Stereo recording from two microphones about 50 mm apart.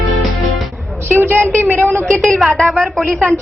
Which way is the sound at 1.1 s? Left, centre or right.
Right.